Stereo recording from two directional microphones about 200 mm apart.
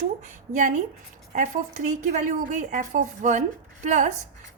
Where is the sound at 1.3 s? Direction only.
35° right (ahead or behind).